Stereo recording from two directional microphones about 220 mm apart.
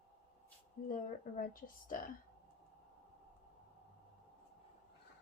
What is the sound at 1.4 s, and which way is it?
Speech, 40° left (ahead or behind).